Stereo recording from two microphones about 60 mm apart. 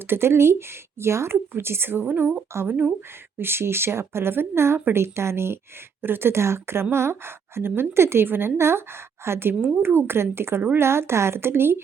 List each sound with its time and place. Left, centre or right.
0.0 s a woman's voice: right